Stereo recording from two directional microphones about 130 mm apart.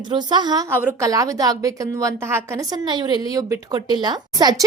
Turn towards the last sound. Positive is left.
turn(degrees=-30)  # may be behind; listen again after turning